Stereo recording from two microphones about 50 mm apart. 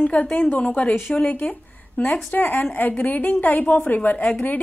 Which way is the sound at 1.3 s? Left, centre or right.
Left.